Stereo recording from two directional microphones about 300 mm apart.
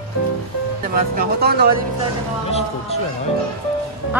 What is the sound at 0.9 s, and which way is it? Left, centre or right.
Speech, right.